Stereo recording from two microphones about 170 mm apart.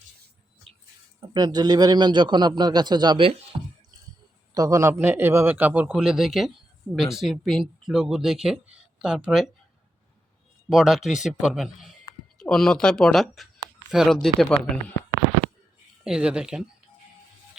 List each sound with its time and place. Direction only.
1.3 s speech: 25° right (ahead or behind)
4.5 s a man's voice: 20° right (ahead or behind); by 9.5 s centre (ahead or behind)
10.7 s a man's voice: centre (ahead or behind)
16.0 s a man's voice: 5° right (ahead or behind)